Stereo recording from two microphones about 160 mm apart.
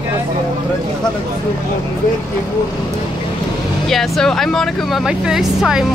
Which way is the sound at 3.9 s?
Centre (ahead or behind).